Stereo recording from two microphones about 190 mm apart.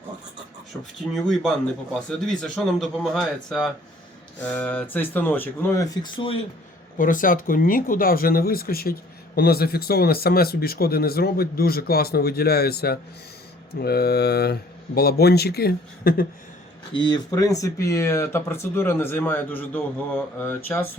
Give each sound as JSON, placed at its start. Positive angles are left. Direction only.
{"t": 1.1, "sound": "speech", "side_deg": 0}
{"t": 7.0, "sound": "speech", "side_deg": 45}
{"t": 17.1, "sound": "speech", "side_deg": 20}